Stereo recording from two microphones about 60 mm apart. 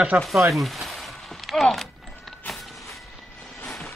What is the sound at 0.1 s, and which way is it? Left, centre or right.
Speech, right.